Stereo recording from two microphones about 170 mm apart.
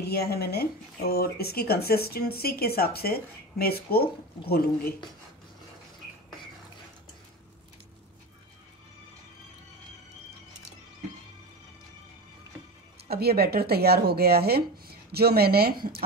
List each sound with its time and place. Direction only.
0.0 s speech: 70° left (ahead or behind)
13.1 s a woman's voice: 65° right (ahead or behind)